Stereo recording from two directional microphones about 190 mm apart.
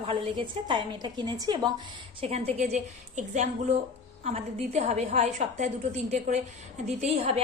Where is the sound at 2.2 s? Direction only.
35° right (ahead or behind).